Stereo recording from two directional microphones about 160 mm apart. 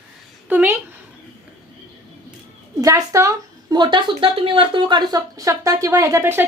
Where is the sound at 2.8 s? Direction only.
20° right (ahead or behind).